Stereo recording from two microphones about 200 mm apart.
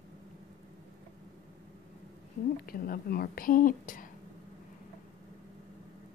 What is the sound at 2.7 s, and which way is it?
A woman's voice, 50° left (ahead or behind).